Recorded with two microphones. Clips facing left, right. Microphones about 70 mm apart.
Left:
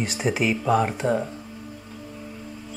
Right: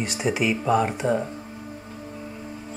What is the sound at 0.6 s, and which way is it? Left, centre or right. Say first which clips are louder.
Speech: even; centre.